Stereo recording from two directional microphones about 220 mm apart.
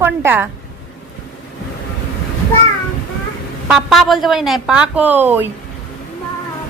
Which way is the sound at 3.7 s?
Centre (ahead or behind).